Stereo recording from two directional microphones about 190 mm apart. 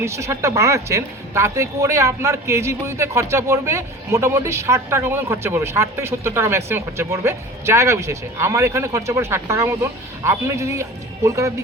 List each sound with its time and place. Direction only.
0.0 s speech: 15° right (ahead or behind)